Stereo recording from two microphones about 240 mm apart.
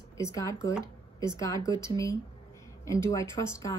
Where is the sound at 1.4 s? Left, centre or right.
Centre.